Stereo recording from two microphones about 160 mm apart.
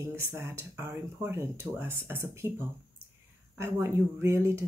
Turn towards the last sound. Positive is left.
turn(degrees=-15)  # may be behind; listen again after turning